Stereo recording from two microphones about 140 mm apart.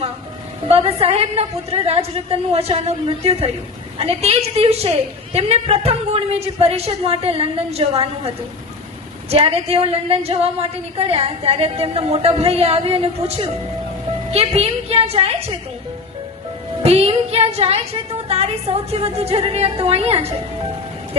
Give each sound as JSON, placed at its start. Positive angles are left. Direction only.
{"t": 0.7, "sound": "a woman's voice", "side_deg": -45}
{"t": 9.3, "sound": "a woman's voice", "side_deg": -45}
{"t": 16.8, "sound": "a woman's voice", "side_deg": -45}